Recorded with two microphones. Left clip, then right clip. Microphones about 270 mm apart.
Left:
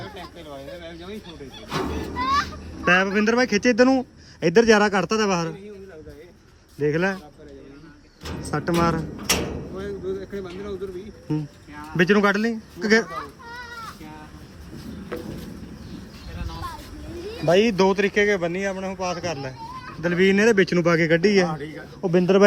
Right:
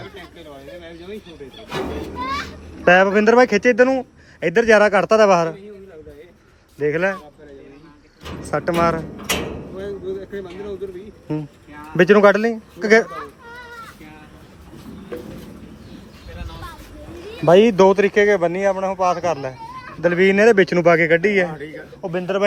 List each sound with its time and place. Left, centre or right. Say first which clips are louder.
2.1 s a child's voice: left 5 dB; centre
6.7 s a child's voice: right 3 dB; centre
8.4 s a child's voice: right 5 dB; centre
11.3 s a child's voice: right 2 dB; centre
17.5 s a child's voice: right 7 dB; centre; by 22.4 s left